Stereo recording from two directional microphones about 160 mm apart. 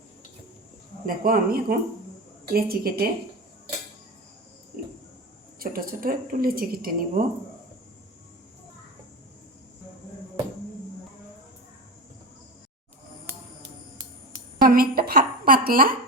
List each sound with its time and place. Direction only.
1.0 s a woman's voice: 65° right (ahead or behind)
5.5 s a woman's voice: 65° right (ahead or behind)
14.6 s a sound: 65° right (ahead or behind)